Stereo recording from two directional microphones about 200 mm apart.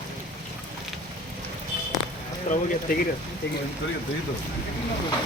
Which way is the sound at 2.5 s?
35° left (ahead or behind).